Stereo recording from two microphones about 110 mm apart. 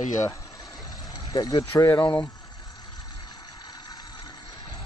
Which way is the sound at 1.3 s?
35° left (ahead or behind).